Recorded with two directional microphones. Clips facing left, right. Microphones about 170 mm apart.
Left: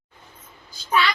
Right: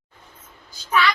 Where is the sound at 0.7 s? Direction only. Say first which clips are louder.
Even; 30° left (ahead or behind).